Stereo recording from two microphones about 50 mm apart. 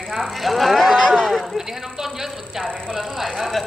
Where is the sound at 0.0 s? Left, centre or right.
Centre.